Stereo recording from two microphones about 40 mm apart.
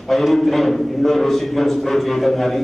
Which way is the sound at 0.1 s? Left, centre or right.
Centre.